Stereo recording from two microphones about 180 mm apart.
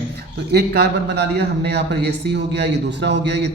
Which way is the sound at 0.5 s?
65° right (ahead or behind).